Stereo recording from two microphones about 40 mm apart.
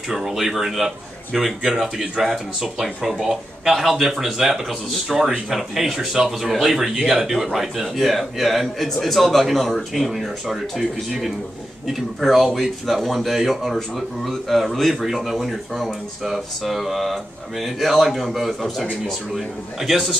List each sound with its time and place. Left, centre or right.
0.1 s a man's voice: centre